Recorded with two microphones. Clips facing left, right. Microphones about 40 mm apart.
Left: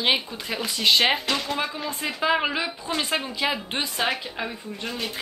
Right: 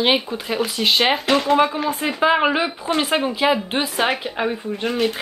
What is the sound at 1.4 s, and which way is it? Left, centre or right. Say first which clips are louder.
A woman's voice: right 11 dB; right.